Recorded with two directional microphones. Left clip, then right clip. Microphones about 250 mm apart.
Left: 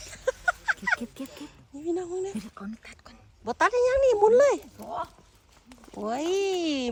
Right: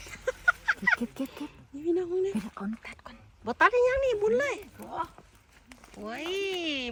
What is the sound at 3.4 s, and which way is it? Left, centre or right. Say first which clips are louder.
Speech: even; centre.